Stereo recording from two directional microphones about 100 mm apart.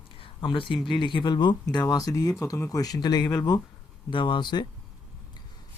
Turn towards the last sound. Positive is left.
turn(degrees=50)  # may be behind; listen again after turning